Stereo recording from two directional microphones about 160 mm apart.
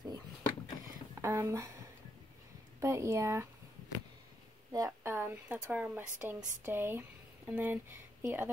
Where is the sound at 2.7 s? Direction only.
20° right (ahead or behind).